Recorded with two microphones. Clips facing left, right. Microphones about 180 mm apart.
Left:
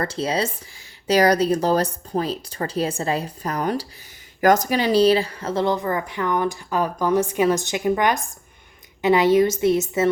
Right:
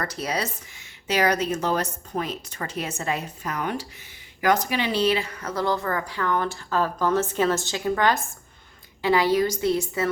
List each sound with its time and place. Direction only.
0.0 s speech: 30° left (ahead or behind)